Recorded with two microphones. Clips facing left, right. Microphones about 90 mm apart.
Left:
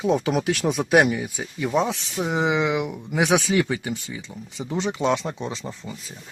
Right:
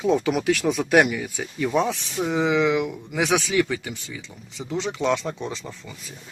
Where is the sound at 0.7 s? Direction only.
20° left (ahead or behind).